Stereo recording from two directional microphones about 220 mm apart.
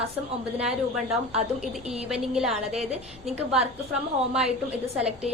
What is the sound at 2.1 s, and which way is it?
Speech, centre (ahead or behind).